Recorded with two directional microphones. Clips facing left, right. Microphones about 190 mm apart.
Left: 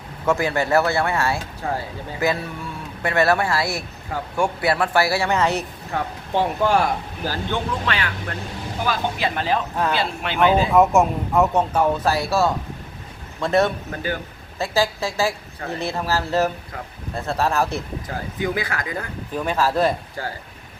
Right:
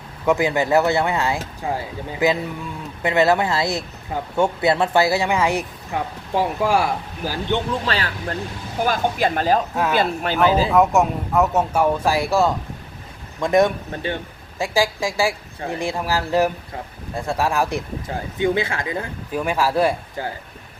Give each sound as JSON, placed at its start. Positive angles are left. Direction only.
{"t": 0.3, "sound": "speech", "side_deg": -15}
{"t": 7.9, "sound": "speech", "side_deg": -35}
{"t": 8.8, "sound": "speech", "side_deg": -45}
{"t": 10.8, "sound": "speech", "side_deg": 0}
{"t": 13.9, "sound": "speech", "side_deg": -25}
{"t": 14.6, "sound": "speech", "side_deg": -15}
{"t": 18.3, "sound": "speech", "side_deg": -25}
{"t": 19.3, "sound": "speech", "side_deg": -10}